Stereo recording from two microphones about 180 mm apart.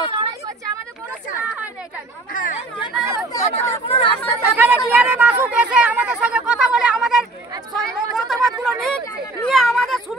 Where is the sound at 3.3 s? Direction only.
15° left (ahead or behind).